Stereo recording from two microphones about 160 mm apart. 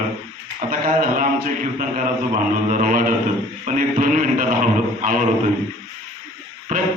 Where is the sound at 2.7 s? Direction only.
55° right (ahead or behind).